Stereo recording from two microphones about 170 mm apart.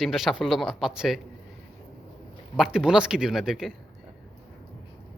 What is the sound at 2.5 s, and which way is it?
Speech, 5° right (ahead or behind).